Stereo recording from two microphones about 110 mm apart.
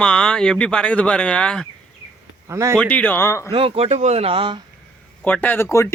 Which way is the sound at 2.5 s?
25° right (ahead or behind).